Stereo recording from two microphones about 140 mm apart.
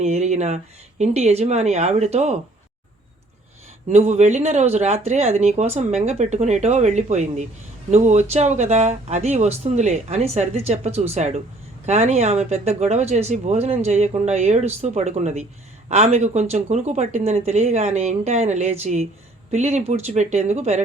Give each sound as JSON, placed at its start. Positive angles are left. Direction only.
{"t": 0.0, "sound": "speech", "side_deg": -50}
{"t": 3.8, "sound": "speech", "side_deg": -55}